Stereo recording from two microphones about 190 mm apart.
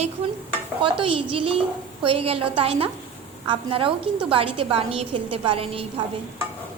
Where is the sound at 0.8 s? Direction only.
30° right (ahead or behind).